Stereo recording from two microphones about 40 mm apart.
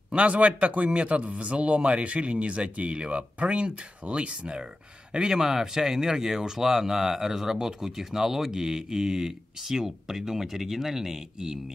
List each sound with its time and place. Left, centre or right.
0.1 s speech: right; by 11.6 s centre